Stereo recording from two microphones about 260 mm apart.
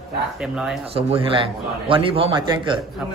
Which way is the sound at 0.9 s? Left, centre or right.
Right.